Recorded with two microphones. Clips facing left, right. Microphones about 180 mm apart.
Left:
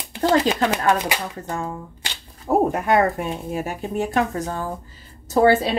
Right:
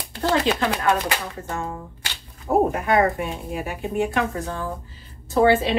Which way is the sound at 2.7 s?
40° left (ahead or behind).